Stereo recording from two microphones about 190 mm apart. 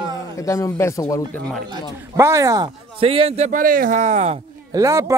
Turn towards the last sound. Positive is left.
turn(degrees=-15)  # may be behind; listen again after turning